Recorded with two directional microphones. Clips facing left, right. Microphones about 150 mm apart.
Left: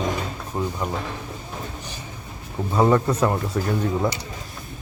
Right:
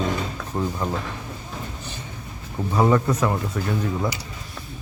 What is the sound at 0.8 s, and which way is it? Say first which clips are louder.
Speech: right 1 dB; 10° left (ahead or behind).